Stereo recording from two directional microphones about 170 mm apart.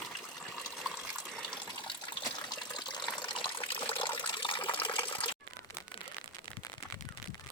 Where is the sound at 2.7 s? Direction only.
25° left (ahead or behind).